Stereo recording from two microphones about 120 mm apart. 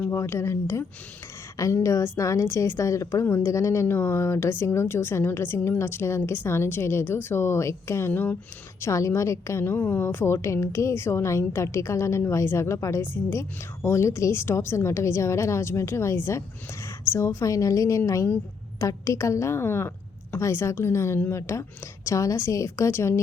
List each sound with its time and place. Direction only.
0.0 s a woman's voice: 20° left (ahead or behind)